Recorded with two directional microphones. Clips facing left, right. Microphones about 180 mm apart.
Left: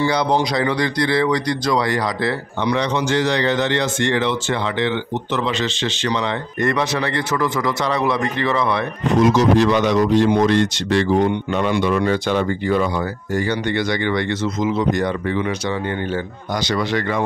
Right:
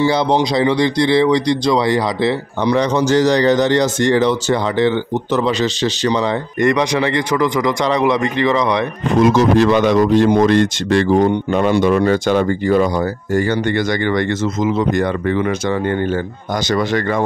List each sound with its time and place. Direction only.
0.0 s speech: 25° right (ahead or behind)
6.6 s speech: 15° right (ahead or behind)
9.2 s speech: 55° right (ahead or behind)
16.6 s speech: 45° right (ahead or behind)